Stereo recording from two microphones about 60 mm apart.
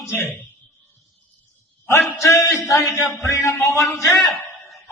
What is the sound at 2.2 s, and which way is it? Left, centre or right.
A man's voice, left.